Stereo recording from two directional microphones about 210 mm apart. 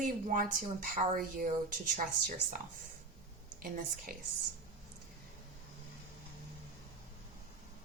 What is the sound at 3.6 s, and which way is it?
Speech, 40° right (ahead or behind).